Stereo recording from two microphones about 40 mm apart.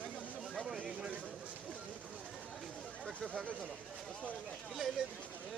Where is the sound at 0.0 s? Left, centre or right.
Left.